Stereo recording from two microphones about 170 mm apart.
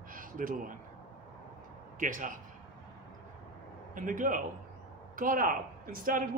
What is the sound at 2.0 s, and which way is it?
Speech, 50° right (ahead or behind).